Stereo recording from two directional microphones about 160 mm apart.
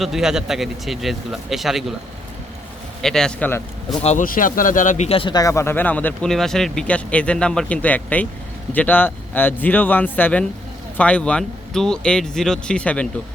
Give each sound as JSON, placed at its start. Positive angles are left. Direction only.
{"t": 0.0, "sound": "speech", "side_deg": 0}
{"t": 3.0, "sound": "speech", "side_deg": 5}
{"t": 4.0, "sound": "speech", "side_deg": 45}
{"t": 4.3, "sound": "speech", "side_deg": 60}